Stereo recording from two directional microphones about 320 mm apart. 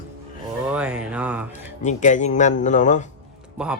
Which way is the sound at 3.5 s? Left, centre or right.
Centre.